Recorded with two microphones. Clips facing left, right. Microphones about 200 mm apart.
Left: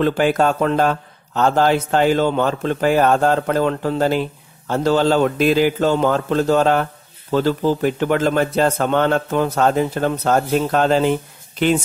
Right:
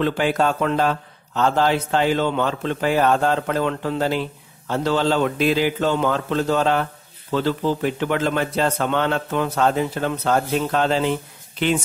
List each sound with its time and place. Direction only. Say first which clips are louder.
0.0 s speech: left 3 dB; 45° left (ahead or behind)